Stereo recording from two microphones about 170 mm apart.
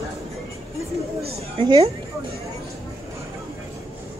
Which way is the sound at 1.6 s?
30° right (ahead or behind).